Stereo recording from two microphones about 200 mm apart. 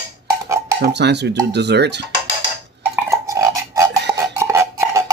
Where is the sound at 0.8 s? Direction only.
60° right (ahead or behind).